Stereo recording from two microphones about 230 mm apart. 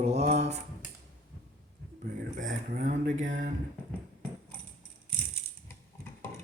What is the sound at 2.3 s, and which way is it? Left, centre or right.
Speech, right.